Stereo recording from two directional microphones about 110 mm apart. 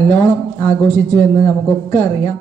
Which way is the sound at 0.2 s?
20° left (ahead or behind).